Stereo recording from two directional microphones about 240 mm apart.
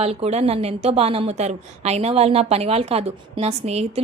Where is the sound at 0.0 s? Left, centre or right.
Right.